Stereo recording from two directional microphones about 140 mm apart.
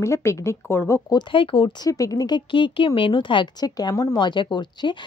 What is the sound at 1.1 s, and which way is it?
Speech, 40° left (ahead or behind).